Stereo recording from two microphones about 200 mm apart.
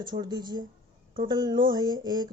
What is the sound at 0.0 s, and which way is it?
Speech, 20° right (ahead or behind).